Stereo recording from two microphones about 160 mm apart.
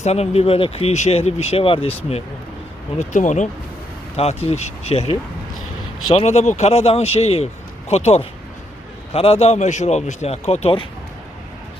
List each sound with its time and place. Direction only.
0.0 s speech: 40° left (ahead or behind)
3.0 s speech: 50° left (ahead or behind)
6.1 s speech: 45° left (ahead or behind)